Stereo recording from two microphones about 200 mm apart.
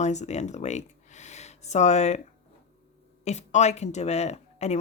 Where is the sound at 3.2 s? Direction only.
35° left (ahead or behind).